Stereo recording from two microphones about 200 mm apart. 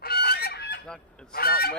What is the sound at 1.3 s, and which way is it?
Speech, 50° left (ahead or behind).